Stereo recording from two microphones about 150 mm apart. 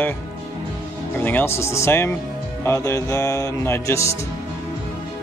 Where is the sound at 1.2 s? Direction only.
15° left (ahead or behind).